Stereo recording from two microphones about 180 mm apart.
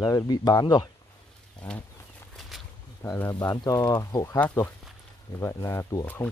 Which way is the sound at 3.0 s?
15° left (ahead or behind).